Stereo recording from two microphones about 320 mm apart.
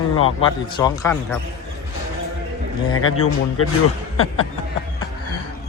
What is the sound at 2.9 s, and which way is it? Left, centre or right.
Speech, left.